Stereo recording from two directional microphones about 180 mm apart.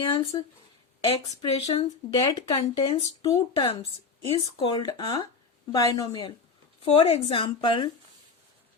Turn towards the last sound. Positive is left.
turn(degrees=25)  # may be behind; listen again after turning